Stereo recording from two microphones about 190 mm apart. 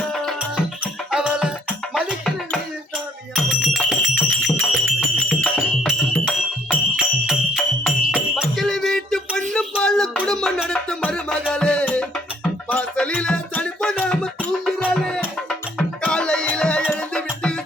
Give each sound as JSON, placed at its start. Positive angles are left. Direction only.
{"t": 0.1, "sound": "music", "side_deg": 0}